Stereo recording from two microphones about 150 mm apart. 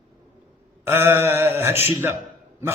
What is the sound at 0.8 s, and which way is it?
A man's voice, 15° right (ahead or behind).